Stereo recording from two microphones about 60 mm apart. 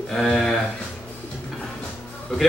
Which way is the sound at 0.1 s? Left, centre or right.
Centre.